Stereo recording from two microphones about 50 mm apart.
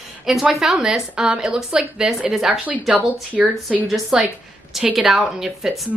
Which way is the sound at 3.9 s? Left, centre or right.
Centre.